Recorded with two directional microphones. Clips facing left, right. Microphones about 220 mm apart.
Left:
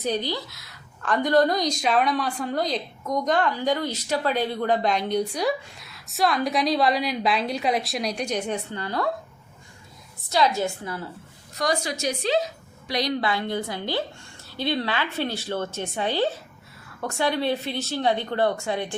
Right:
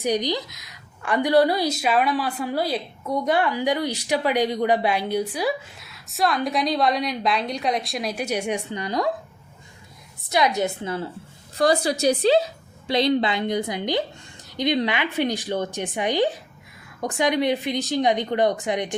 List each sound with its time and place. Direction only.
0.0 s a woman's voice: 15° right (ahead or behind)
10.2 s a woman's voice: 15° right (ahead or behind)
11.5 s a woman's voice: 30° right (ahead or behind)